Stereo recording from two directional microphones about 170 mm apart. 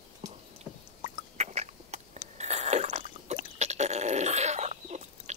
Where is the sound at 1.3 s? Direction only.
40° right (ahead or behind).